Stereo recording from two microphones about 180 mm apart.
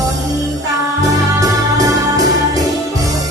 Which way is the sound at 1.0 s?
20° right (ahead or behind).